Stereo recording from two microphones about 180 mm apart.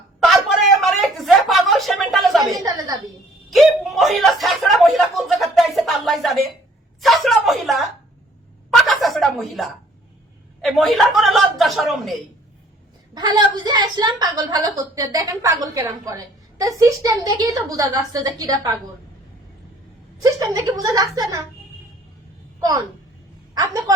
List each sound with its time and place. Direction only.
0.3 s a sound: centre (ahead or behind)
2.6 s a woman's voice: 20° right (ahead or behind)
3.5 s a sound: centre (ahead or behind)
10.6 s a woman's voice: centre (ahead or behind)
13.1 s a woman's voice: 20° right (ahead or behind)
20.2 s a woman's voice: 20° right (ahead or behind)
23.6 s a woman's voice: 20° right (ahead or behind)